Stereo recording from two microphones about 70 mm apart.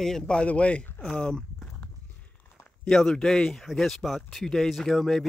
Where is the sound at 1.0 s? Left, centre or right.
Centre.